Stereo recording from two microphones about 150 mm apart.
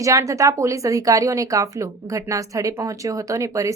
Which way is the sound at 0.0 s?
20° right (ahead or behind).